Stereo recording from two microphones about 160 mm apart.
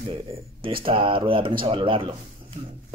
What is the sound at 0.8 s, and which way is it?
Speech, 35° right (ahead or behind).